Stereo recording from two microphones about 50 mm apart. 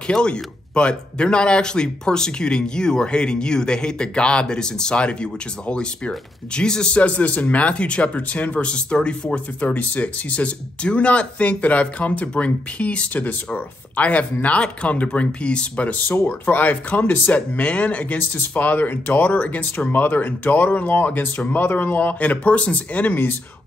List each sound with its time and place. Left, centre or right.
0.0 s speech: centre
9.6 s speech: left